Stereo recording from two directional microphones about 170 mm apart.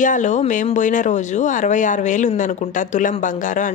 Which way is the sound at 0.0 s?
45° left (ahead or behind).